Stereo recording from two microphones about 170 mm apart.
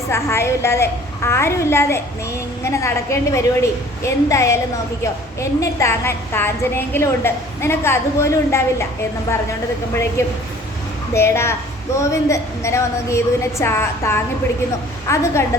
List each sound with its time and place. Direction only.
0.1 s a woman's voice: 15° left (ahead or behind)
9.9 s a woman's voice: 15° left (ahead or behind)